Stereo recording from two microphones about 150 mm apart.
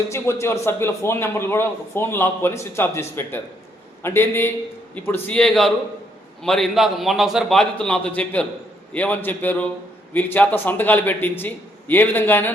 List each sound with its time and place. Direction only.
0.1 s a man's voice: 15° left (ahead or behind)